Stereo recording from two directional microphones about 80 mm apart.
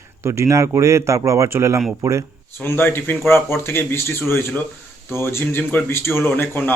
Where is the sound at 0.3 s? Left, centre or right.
Right.